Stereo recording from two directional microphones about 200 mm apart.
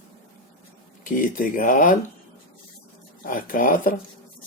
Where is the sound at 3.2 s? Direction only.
45° left (ahead or behind).